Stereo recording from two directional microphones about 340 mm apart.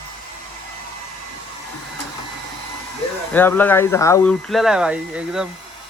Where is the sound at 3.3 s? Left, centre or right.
Centre.